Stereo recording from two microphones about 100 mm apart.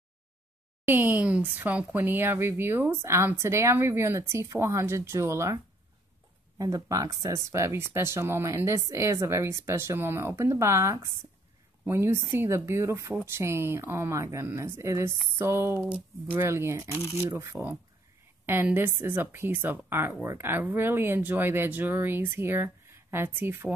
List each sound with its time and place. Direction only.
0.8 s speech: 20° right (ahead or behind)
6.6 s speech: 35° right (ahead or behind)
16.9 s speech: 30° left (ahead or behind)
17.4 s speech: 30° right (ahead or behind)